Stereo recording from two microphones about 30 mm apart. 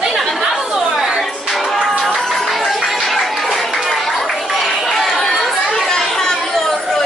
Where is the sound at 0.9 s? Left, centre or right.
Centre.